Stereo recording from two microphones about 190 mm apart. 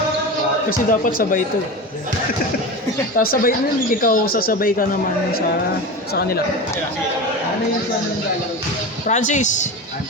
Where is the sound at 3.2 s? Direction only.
50° left (ahead or behind).